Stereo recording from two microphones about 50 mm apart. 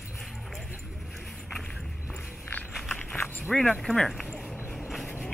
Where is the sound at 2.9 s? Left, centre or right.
Left.